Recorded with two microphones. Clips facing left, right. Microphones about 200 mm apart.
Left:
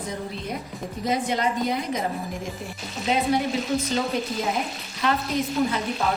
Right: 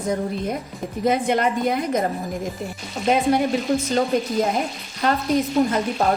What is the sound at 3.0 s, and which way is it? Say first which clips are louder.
Speech: right 4 dB; 50° right (ahead or behind).